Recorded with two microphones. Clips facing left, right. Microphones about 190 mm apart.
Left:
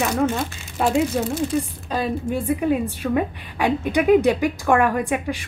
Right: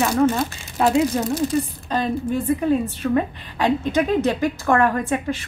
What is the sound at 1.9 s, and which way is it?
A woman's voice, 10° left (ahead or behind).